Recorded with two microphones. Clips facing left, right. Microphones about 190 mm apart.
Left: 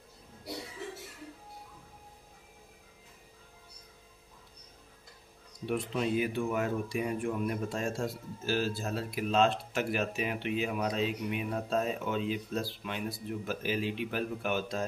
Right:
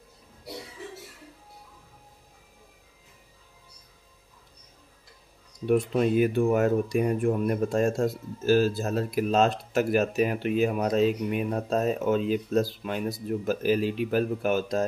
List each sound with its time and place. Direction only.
5.7 s a man's voice: 50° right (ahead or behind)